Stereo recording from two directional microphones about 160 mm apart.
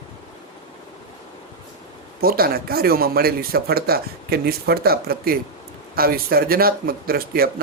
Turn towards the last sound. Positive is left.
turn(degrees=-70)  # may be behind; listen again after turning